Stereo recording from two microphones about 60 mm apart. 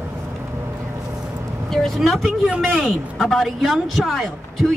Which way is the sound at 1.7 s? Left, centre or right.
Centre.